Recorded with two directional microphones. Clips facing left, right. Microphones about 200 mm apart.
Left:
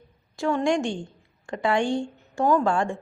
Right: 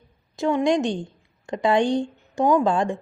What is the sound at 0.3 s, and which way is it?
A woman's voice, 20° right (ahead or behind).